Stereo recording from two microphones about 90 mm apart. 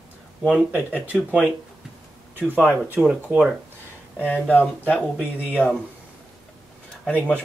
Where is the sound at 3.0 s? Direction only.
15° right (ahead or behind).